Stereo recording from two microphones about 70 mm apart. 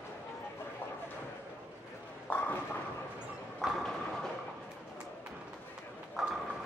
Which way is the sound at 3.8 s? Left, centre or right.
Centre.